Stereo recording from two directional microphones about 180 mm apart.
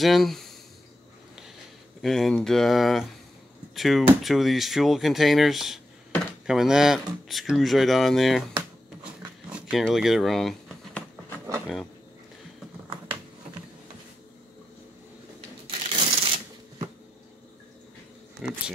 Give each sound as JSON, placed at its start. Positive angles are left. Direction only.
{"t": 0.0, "sound": "speech", "side_deg": 0}
{"t": 2.0, "sound": "speech", "side_deg": 0}
{"t": 9.5, "sound": "speech", "side_deg": -5}
{"t": 15.6, "sound": "shuffling cards", "side_deg": -30}
{"t": 18.4, "sound": "speech", "side_deg": -5}